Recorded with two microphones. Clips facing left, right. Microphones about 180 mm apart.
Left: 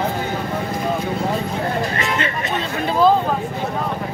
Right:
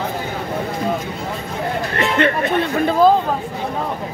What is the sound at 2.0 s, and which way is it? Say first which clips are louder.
Speech: right 5 dB; 55° right (ahead or behind).